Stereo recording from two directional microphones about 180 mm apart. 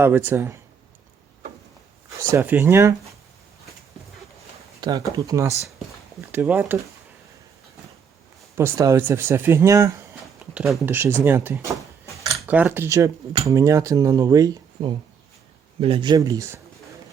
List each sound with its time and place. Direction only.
0.0 s speech: 10° right (ahead or behind)
2.0 s speech: 15° right (ahead or behind)
4.8 s speech: 20° right (ahead or behind)
8.5 s speech: 15° right (ahead or behind)
10.5 s speech: 5° right (ahead or behind)
12.1 s a sound: 15° right (ahead or behind)
12.5 s speech: 10° right (ahead or behind)